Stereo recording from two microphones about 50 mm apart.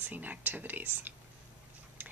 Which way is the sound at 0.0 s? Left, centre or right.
Right.